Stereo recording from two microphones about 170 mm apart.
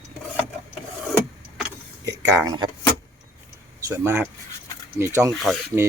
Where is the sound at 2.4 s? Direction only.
25° right (ahead or behind).